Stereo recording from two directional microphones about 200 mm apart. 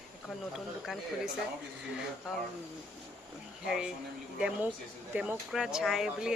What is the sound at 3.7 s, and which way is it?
Speech, centre (ahead or behind).